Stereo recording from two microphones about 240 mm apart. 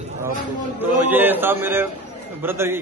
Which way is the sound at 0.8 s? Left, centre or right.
Centre.